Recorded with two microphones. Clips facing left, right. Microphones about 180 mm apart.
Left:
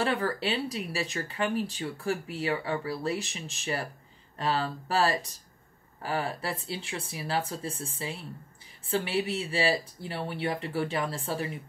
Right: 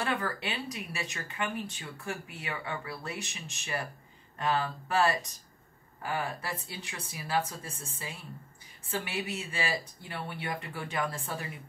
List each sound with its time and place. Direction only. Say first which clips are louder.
0.0 s speech: left 5 dB; 30° left (ahead or behind)